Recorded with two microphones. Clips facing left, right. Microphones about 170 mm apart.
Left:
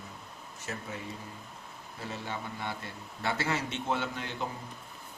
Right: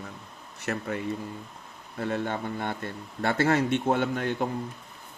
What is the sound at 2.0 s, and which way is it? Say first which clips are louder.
A man's voice: right 9 dB; 60° right (ahead or behind).